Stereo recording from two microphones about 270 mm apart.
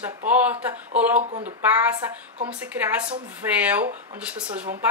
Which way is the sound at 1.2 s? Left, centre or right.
Right.